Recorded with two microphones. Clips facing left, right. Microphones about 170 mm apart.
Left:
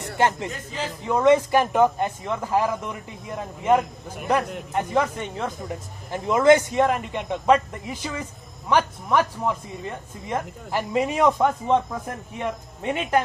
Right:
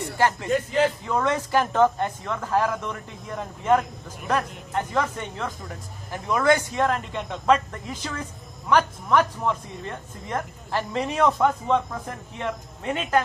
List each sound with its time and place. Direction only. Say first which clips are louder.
0.2 s speech: left 1 dB; 20° left (ahead or behind)
0.5 s a man's voice: right 10 dB; 65° right (ahead or behind)
1.0 s speech: left 7 dB; 15° left (ahead or behind)